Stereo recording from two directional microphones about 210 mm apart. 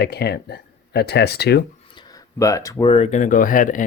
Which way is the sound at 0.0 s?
50° left (ahead or behind).